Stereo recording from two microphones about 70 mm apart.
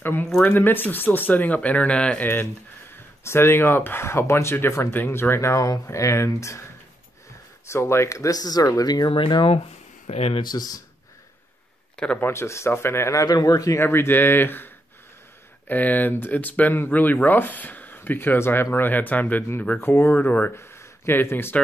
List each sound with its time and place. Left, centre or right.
0.0 s speech: left; by 2.2 s centre
3.3 s speech: left
7.7 s speech: left
10.4 s speech: left
12.2 s speech: left
13.2 s speech: left
13.7 s speech: left